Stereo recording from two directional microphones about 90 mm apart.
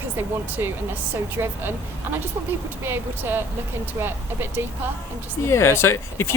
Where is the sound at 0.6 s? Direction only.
30° right (ahead or behind).